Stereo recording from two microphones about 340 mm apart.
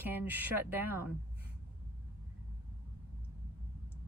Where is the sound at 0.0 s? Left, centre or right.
Centre.